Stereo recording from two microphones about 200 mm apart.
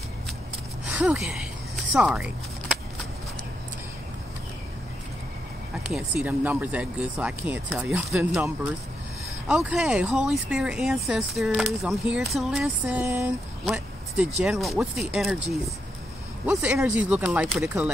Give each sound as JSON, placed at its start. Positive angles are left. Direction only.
{"t": 0.8, "sound": "a sound", "side_deg": -5}
{"t": 5.9, "sound": "speech", "side_deg": -5}
{"t": 9.5, "sound": "speech", "side_deg": -5}
{"t": 16.4, "sound": "speech", "side_deg": -10}